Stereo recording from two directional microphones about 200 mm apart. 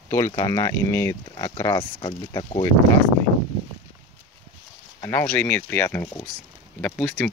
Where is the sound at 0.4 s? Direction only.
15° left (ahead or behind).